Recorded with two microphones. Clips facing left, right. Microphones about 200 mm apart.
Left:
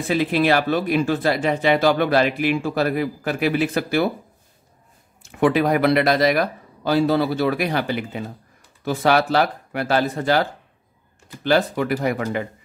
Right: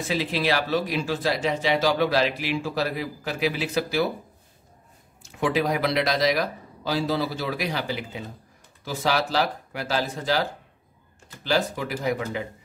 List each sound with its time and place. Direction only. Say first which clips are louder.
0.1 s speech: left 7 dB; 55° left (ahead or behind)
5.2 s speech: left 6 dB; 55° left (ahead or behind)